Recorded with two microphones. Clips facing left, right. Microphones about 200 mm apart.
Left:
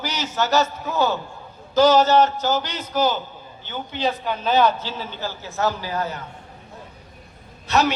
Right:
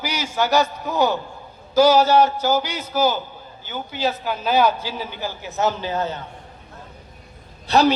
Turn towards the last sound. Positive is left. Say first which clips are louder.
# right 4 dB
turn(degrees=-35)  # may be behind; listen again after turning